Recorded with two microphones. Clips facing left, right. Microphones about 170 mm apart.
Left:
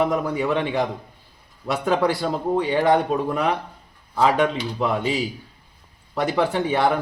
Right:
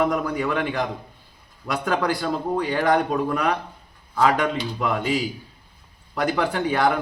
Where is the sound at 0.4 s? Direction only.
25° left (ahead or behind).